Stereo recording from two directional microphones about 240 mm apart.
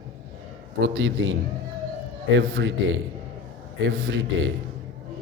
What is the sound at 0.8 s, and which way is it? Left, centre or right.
Speech, right.